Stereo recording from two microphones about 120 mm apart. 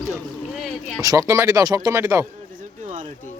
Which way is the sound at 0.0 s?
Centre (ahead or behind).